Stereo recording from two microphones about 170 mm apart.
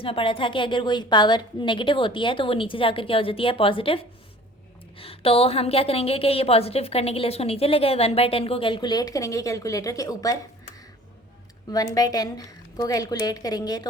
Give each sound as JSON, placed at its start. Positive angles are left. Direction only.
{"t": 0.0, "sound": "a woman's voice", "side_deg": 30}
{"t": 11.7, "sound": "a woman's voice", "side_deg": 20}